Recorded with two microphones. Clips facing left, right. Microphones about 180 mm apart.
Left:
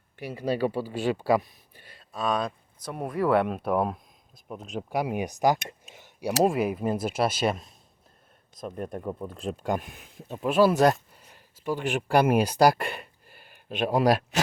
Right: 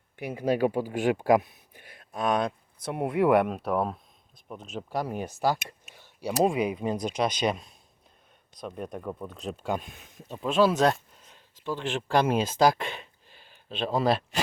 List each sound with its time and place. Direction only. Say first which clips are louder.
0.2 s speech: right 2 dB; 15° right (ahead or behind)
3.4 s speech: left 2 dB; 5° left (ahead or behind)
5.8 s tick-tock: left 2 dB; 20° left (ahead or behind)
6.4 s speech: left 1 dB; centre (ahead or behind)
9.0 s speech: left 2 dB; 10° left (ahead or behind)
10.9 s a sound: left 1 dB; 5° left (ahead or behind)
11.6 s speech: left 3 dB; 10° left (ahead or behind)